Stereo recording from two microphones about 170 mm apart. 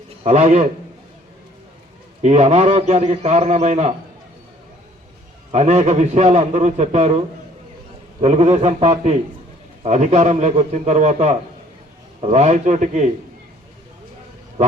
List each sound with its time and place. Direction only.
0.2 s a man's voice: 40° right (ahead or behind)
2.2 s a man's voice: 40° right (ahead or behind)
5.5 s a man's voice: 40° right (ahead or behind)
8.2 s a man's voice: 40° right (ahead or behind)